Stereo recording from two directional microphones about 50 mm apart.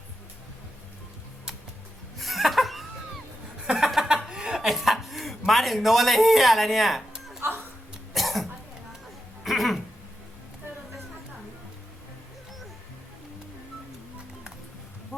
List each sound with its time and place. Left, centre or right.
2.1 s chuckle: centre
4.7 s cough: centre
5.5 s speech: centre
7.4 s a sound: right
8.1 s cough: centre
9.4 s a sound: centre